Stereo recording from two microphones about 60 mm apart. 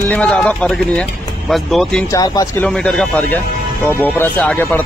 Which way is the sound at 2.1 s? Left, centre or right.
Left.